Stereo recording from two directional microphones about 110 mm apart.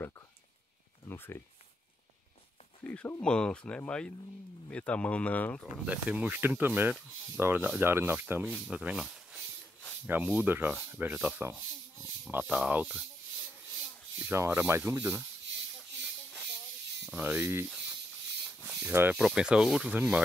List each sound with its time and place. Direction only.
1.0 s speech: 20° left (ahead or behind)
2.8 s speech: 10° left (ahead or behind)
5.9 s speech: 15° right (ahead or behind)
8.6 s speech: 5° right (ahead or behind)
9.0 s a sound: centre (ahead or behind)
10.0 s speech: 15° right (ahead or behind)
14.1 s speech: 20° right (ahead or behind)
17.1 s speech: 15° right (ahead or behind)
18.4 s a sound: 5° right (ahead or behind)
18.9 s speech: 20° right (ahead or behind)
19.1 s speech: 5° right (ahead or behind)